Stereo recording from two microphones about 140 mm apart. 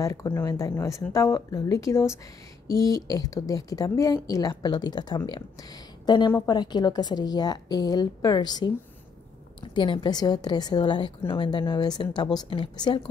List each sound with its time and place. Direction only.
0.0 s a woman's voice: 20° left (ahead or behind)